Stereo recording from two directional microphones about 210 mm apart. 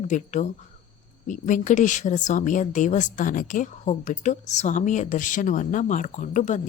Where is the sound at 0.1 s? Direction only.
35° left (ahead or behind).